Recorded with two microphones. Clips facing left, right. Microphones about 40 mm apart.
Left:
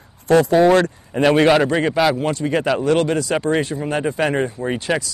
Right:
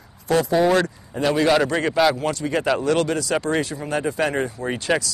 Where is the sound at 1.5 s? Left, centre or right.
Centre.